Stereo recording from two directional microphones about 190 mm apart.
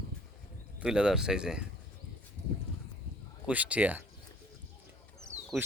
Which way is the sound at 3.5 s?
5° right (ahead or behind).